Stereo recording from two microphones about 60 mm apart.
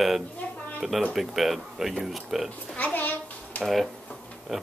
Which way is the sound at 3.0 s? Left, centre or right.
Left.